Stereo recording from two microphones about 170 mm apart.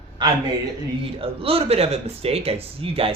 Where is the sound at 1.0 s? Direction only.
35° right (ahead or behind).